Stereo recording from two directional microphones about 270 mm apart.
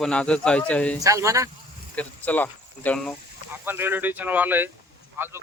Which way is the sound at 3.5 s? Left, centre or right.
Centre.